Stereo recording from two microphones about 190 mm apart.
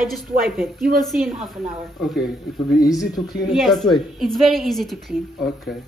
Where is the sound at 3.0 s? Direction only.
20° left (ahead or behind).